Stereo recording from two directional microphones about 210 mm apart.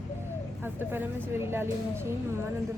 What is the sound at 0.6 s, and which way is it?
Speech, 10° right (ahead or behind).